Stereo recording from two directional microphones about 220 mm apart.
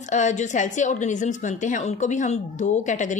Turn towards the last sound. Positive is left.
turn(degrees=35)  # may be behind; listen again after turning